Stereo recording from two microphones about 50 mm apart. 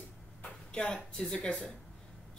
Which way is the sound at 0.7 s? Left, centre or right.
Left.